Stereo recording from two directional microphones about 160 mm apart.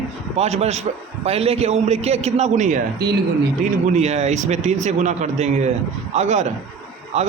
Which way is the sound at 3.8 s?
45° right (ahead or behind).